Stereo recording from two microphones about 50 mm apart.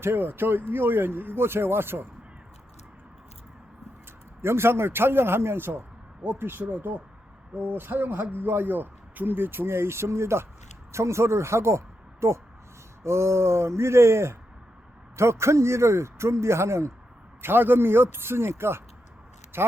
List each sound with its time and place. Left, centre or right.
0.0 s a man's voice: right
4.4 s a man's voice: right
17.4 s a man's voice: right